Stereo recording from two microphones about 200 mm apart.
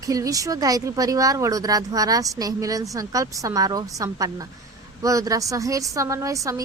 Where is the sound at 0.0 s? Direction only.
15° right (ahead or behind).